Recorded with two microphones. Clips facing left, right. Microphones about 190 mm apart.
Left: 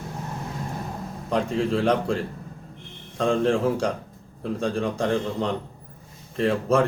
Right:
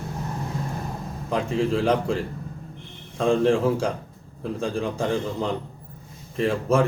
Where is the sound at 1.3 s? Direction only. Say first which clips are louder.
Even; centre (ahead or behind).